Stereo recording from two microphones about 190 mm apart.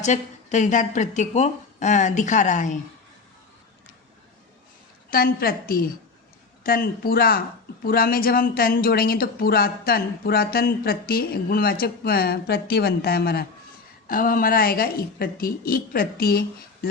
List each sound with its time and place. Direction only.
0.0 s a woman's voice: 40° left (ahead or behind)
5.1 s speech: 50° left (ahead or behind)